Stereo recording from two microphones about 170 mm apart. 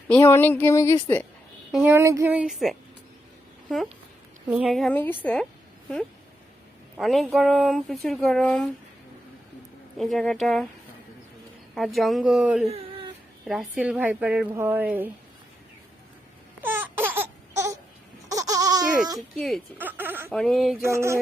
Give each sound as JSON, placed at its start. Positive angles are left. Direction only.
{"t": 0.1, "sound": "speech", "side_deg": 15}
{"t": 1.7, "sound": "a woman's voice", "side_deg": -10}
{"t": 4.4, "sound": "speech", "side_deg": -5}
{"t": 7.0, "sound": "speech", "side_deg": 0}
{"t": 10.0, "sound": "speech", "side_deg": 0}
{"t": 11.7, "sound": "speech", "side_deg": 0}
{"t": 12.6, "sound": "a sound", "side_deg": -35}
{"t": 13.4, "sound": "a woman's voice", "side_deg": -5}
{"t": 16.6, "sound": "baby cry", "side_deg": -10}
{"t": 18.3, "sound": "baby laughter", "side_deg": -20}
{"t": 19.4, "sound": "speech", "side_deg": 0}
{"t": 19.8, "sound": "a sound", "side_deg": -10}
{"t": 20.3, "sound": "speech", "side_deg": 5}
{"t": 20.8, "sound": "a woman's voice", "side_deg": -15}